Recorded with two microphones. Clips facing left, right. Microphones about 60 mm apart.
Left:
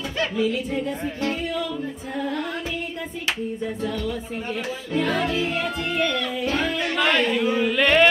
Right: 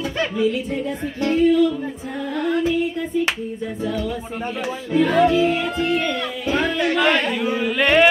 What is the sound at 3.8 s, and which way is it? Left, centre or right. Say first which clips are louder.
Music: right 3 dB; centre.